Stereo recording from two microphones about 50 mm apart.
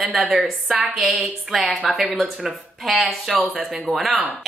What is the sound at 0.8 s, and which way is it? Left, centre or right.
Speech, centre.